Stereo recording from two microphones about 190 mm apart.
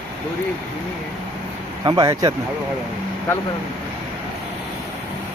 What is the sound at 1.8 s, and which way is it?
Speech, 20° right (ahead or behind).